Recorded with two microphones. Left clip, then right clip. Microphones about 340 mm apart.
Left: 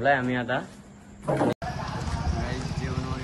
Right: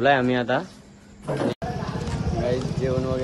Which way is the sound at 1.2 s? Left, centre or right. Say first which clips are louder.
Left 1 dB; centre.